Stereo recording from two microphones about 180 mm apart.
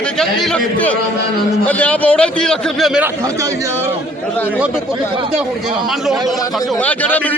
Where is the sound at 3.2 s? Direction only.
15° right (ahead or behind).